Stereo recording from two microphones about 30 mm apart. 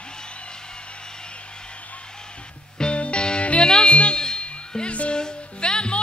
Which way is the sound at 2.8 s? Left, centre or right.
Left.